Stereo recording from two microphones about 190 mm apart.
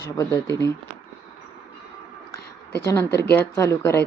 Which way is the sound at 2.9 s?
15° left (ahead or behind).